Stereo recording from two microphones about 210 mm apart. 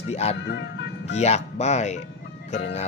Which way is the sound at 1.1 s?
30° left (ahead or behind).